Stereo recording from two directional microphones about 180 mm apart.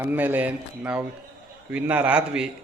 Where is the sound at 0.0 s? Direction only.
10° right (ahead or behind).